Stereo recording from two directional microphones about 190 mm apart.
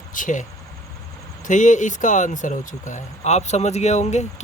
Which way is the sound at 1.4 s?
40° left (ahead or behind).